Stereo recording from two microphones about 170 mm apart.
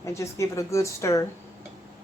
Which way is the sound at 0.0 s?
15° left (ahead or behind).